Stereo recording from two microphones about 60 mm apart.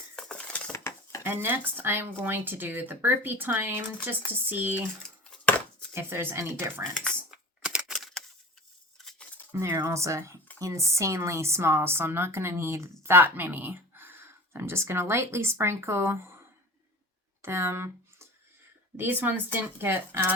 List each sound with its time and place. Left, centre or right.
0.2 s cutlery: centre
0.7 s cutlery: left
1.2 s speech: right
5.9 s speech: right
7.3 s typing: centre
7.9 s typewriter: centre
9.7 s speech: right
17.4 s speech: right
18.9 s speech: right